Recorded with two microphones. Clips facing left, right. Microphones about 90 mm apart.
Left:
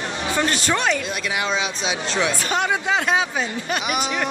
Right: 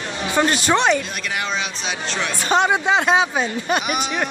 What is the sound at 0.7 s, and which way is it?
Speech, 25° right (ahead or behind).